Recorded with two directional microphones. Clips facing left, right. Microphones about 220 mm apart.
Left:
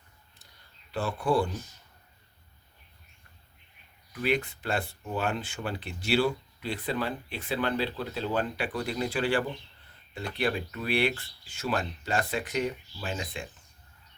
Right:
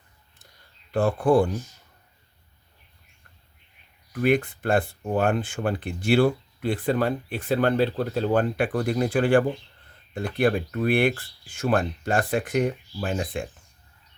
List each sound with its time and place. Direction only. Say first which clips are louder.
0.9 s speech: right 8 dB; 50° right (ahead or behind)
4.1 s speech: right 7 dB; 50° right (ahead or behind)